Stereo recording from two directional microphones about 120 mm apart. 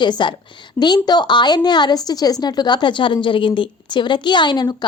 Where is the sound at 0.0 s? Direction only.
40° left (ahead or behind).